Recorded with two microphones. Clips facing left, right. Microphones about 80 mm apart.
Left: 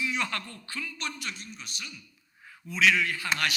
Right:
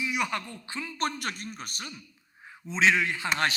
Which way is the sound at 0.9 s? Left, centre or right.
Right.